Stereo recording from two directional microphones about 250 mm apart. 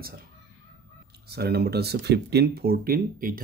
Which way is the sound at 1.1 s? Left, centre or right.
Right.